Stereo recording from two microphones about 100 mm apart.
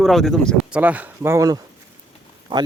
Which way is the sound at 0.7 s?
15° right (ahead or behind).